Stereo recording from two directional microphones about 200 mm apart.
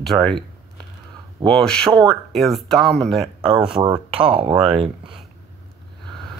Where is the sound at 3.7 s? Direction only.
20° right (ahead or behind).